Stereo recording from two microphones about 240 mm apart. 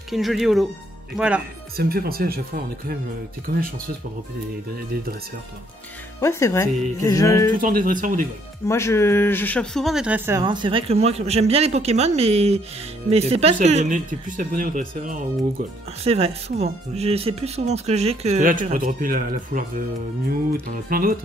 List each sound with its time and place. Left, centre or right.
0.1 s speech: centre
1.8 s speech: right
6.2 s music: centre
7.6 s speech: right
8.6 s speech: centre; by 14.8 s right
16.0 s speech: right